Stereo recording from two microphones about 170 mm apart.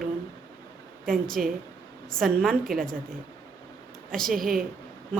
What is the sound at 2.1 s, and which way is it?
Speech, 5° left (ahead or behind).